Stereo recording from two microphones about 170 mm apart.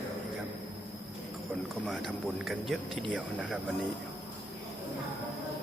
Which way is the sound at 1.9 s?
Centre (ahead or behind).